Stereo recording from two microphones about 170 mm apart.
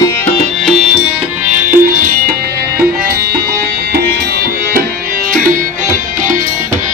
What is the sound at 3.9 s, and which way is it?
Music, 65° right (ahead or behind).